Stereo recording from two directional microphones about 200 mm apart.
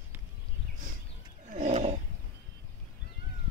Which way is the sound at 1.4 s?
40° right (ahead or behind).